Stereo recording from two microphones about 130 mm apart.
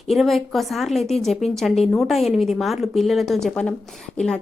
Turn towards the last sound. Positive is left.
turn(degrees=5)  # may be behind; listen again after turning